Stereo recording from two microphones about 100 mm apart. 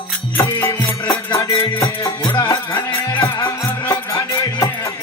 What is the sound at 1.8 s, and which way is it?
Music, 45° left (ahead or behind).